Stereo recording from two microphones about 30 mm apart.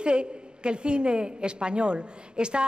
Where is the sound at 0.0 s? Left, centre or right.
Right.